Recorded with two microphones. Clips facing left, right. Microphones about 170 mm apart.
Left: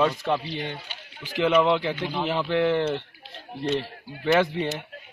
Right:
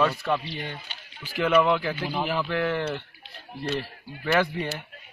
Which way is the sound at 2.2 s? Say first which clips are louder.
Left 5 dB; 25° left (ahead or behind).